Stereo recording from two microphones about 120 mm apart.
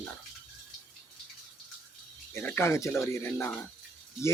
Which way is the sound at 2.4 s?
20° left (ahead or behind).